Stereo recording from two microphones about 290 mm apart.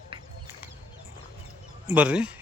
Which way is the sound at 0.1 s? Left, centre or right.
Centre.